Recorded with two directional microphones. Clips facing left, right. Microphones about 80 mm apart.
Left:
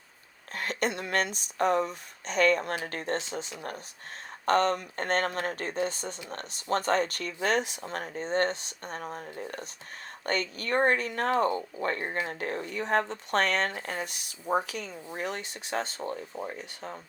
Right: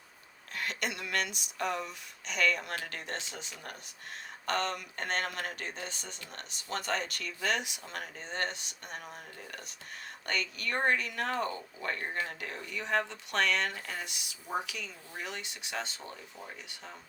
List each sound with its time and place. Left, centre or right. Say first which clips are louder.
0.5 s speech: left 6 dB; left
4.4 s speech: left 8 dB; left